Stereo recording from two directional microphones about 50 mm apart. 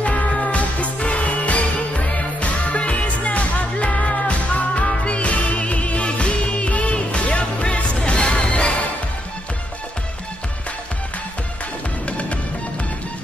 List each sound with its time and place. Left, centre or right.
0.0 s music: left
12.1 s music: left